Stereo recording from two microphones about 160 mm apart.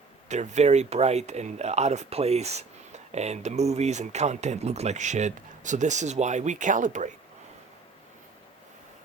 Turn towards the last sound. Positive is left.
turn(degrees=-50)  # may be behind; listen again after turning